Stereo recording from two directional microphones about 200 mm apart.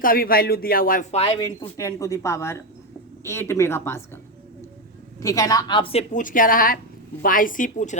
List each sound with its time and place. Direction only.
0.0 s speech: 45° left (ahead or behind)
1.2 s speech: 20° left (ahead or behind)
5.2 s a woman's voice: 15° left (ahead or behind); by 7.9 s 40° left (ahead or behind)